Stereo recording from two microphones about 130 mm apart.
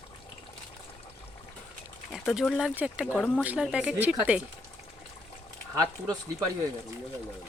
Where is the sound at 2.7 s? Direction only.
10° right (ahead or behind).